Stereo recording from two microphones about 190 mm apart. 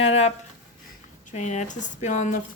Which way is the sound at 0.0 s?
35° left (ahead or behind).